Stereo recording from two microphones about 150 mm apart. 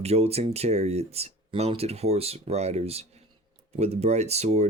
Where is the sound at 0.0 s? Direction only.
45° right (ahead or behind).